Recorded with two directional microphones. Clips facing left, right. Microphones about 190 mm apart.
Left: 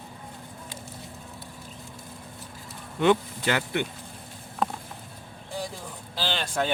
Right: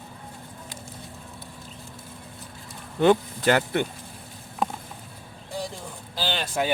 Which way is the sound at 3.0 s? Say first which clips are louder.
Right 3 dB; 40° right (ahead or behind).